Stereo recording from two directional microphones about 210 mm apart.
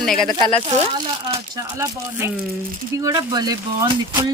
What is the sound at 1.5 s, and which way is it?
Speech, 10° right (ahead or behind).